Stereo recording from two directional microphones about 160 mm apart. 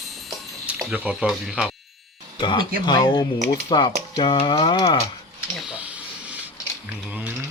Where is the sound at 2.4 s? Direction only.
30° left (ahead or behind).